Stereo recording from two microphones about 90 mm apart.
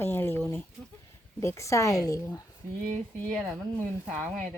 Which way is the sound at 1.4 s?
35° left (ahead or behind).